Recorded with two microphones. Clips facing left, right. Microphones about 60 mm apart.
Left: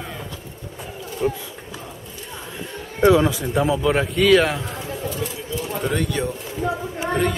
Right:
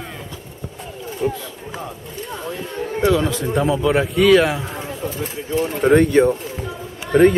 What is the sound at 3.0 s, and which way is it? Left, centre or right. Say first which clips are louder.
Speech: left 3 dB; centre.